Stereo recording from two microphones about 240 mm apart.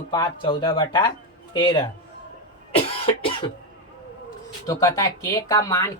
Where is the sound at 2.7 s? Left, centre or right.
Left.